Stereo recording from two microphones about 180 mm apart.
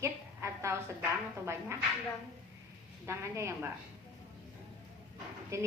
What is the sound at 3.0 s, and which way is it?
Speech, 15° right (ahead or behind).